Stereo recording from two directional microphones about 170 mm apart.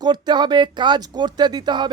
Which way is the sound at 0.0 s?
25° right (ahead or behind).